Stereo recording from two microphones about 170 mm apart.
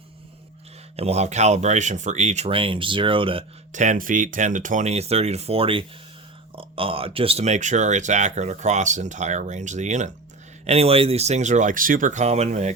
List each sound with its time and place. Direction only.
0.9 s speech: 40° right (ahead or behind)
3.7 s speech: 45° right (ahead or behind)